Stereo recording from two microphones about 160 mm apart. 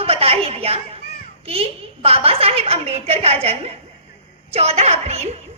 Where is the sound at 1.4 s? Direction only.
40° right (ahead or behind).